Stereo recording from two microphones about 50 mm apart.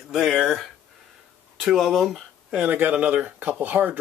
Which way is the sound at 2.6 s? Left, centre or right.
Right.